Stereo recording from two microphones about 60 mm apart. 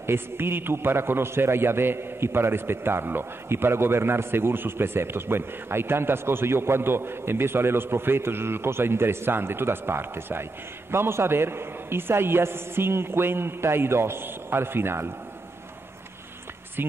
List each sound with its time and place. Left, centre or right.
0.0 s a man's voice: right